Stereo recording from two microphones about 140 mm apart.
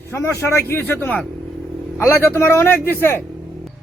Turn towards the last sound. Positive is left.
turn(degrees=15)  # may be behind; listen again after turning